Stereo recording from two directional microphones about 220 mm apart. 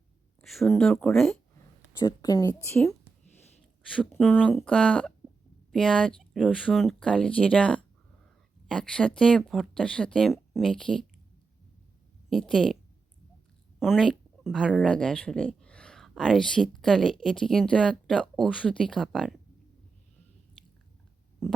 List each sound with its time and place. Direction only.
0.4 s speech: centre (ahead or behind)
2.0 s a woman's voice: 15° left (ahead or behind)
12.3 s speech: centre (ahead or behind)
13.7 s speech: centre (ahead or behind)
21.4 s stomach rumble: centre (ahead or behind)